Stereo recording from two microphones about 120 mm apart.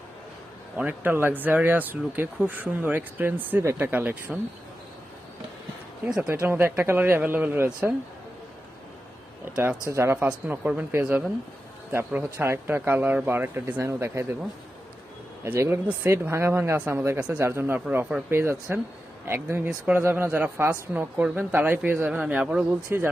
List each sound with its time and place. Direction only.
0.8 s speech: 15° right (ahead or behind)
6.1 s speech: 5° right (ahead or behind)
6.4 s speech: 20° right (ahead or behind)
9.9 s a woman's voice: 20° right (ahead or behind)
10.2 s speech: 10° right (ahead or behind)
15.4 s a woman's voice: 20° right (ahead or behind)
17.2 s speech: 10° right (ahead or behind)
17.4 s a woman's voice: 20° right (ahead or behind)